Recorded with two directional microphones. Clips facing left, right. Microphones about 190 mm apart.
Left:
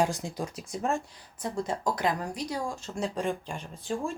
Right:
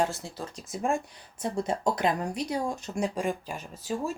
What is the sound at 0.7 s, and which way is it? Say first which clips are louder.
Speech: right 2 dB; 5° right (ahead or behind).